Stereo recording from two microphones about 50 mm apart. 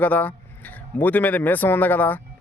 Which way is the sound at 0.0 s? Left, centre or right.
Left.